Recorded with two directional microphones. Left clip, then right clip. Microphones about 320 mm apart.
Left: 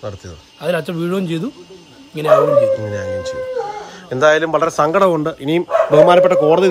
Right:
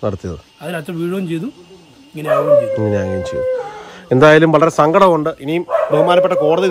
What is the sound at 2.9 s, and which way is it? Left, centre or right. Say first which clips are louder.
A man's voice: right 3 dB; centre.